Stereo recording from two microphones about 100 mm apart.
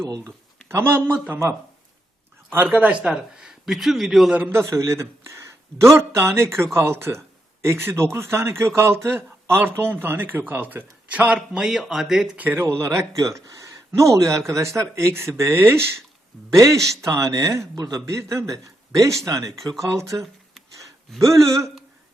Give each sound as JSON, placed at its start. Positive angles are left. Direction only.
{"t": 0.7, "sound": "speech", "side_deg": -25}
{"t": 2.6, "sound": "a man's voice", "side_deg": -15}
{"t": 4.4, "sound": "a man's voice", "side_deg": -30}
{"t": 12.5, "sound": "a man's voice", "side_deg": -25}